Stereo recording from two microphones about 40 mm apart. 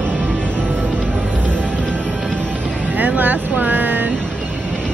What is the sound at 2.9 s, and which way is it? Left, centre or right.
Vehicle, right.